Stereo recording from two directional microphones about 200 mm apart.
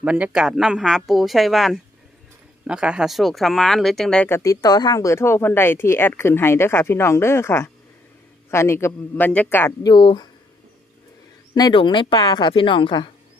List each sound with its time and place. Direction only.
0.0 s speech: 5° right (ahead or behind); by 9.9 s 10° left (ahead or behind)
9.9 s a woman's voice: 25° left (ahead or behind)
11.5 s a woman's voice: 20° left (ahead or behind)